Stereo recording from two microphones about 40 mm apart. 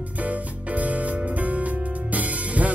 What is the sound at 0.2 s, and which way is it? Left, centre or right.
Music, right.